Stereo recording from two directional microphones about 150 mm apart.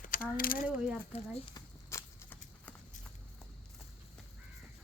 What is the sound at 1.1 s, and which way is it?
Speech, 35° left (ahead or behind).